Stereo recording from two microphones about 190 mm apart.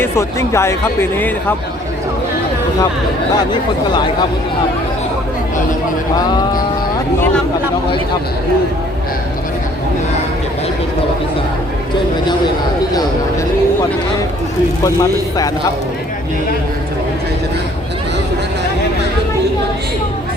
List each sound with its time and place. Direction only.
0.0 s speech: 15° left (ahead or behind)
3.5 s speech: 25° left (ahead or behind)
6.1 s speech: 20° left (ahead or behind)